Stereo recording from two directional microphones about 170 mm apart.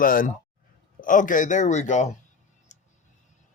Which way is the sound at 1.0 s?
50° left (ahead or behind).